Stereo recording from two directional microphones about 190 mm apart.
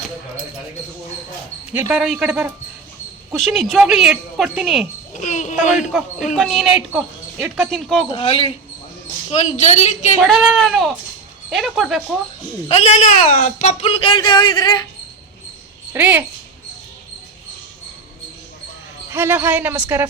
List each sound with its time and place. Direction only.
1.7 s speech: 5° right (ahead or behind)
5.1 s speech: 40° left (ahead or behind)
6.3 s speech: centre (ahead or behind)
8.1 s speech: 30° left (ahead or behind)
10.2 s speech: centre (ahead or behind)
12.6 s speech: 35° left (ahead or behind)
15.9 s speech: 10° right (ahead or behind)
19.1 s speech: 10° right (ahead or behind)